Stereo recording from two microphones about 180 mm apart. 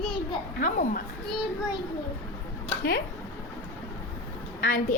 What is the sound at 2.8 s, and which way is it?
Speech, 60° left (ahead or behind).